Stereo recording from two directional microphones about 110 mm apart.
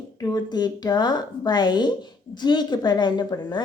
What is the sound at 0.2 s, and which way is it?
Speech, 40° left (ahead or behind).